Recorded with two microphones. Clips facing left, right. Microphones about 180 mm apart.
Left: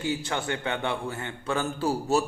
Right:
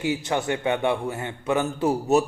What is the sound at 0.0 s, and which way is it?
A man's voice, 20° right (ahead or behind).